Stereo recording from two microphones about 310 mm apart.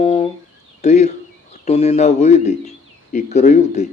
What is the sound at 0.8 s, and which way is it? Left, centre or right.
Speech, left.